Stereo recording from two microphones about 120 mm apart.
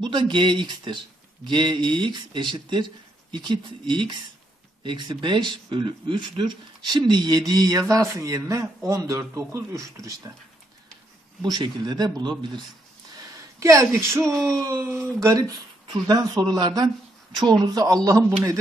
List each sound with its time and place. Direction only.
0.0 s speech: 40° right (ahead or behind)
11.4 s speech: 35° right (ahead or behind)
13.6 s speech: 25° right (ahead or behind)
14.3 s speech: 5° left (ahead or behind)
14.7 s speech: 25° right (ahead or behind)